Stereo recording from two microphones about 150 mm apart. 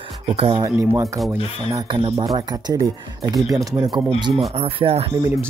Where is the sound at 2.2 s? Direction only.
25° right (ahead or behind).